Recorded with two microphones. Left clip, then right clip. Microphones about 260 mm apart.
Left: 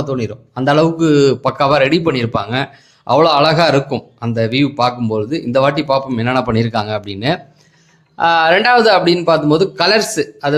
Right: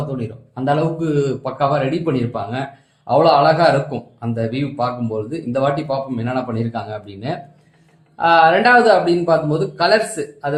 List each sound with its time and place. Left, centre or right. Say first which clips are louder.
0.2 s speech: left 5 dB; left